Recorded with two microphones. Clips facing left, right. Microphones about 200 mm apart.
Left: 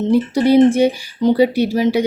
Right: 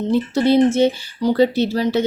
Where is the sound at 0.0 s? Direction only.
10° left (ahead or behind).